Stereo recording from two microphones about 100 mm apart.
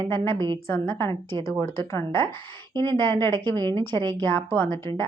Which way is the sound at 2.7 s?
50° right (ahead or behind).